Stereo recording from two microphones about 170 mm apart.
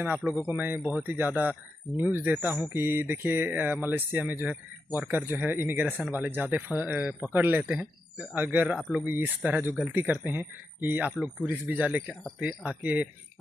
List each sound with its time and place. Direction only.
0.0 s speech: 10° right (ahead or behind)